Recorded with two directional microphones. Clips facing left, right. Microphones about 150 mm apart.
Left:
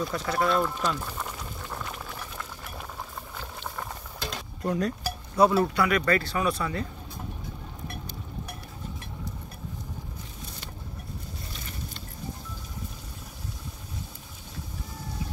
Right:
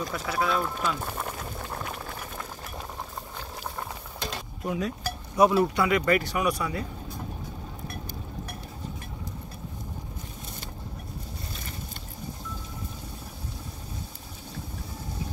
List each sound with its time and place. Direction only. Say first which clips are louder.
0.0 s speech: left 2 dB; 5° right (ahead or behind)
1.4 s boiling: right 2 dB; 50° right (ahead or behind)
4.2 s stir: left 1 dB; 5° right (ahead or behind)
5.3 s speech: even; 15° right (ahead or behind)